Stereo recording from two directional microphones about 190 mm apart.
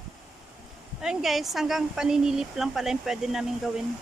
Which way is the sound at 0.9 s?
Centre (ahead or behind).